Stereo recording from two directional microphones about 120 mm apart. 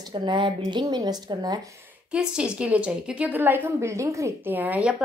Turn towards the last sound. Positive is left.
turn(degrees=-15)  # may be behind; listen again after turning